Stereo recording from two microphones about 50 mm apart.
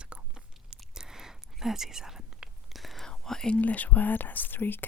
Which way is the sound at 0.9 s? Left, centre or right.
Centre.